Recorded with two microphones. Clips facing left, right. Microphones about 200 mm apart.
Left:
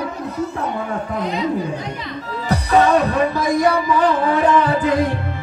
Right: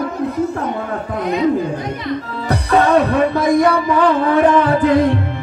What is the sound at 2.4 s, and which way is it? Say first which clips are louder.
Music: even; 60° right (ahead or behind).